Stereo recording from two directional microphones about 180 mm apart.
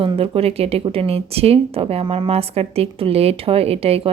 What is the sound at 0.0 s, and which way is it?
Speech, 30° right (ahead or behind).